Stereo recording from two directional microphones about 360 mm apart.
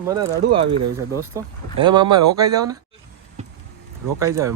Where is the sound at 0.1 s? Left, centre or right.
Centre.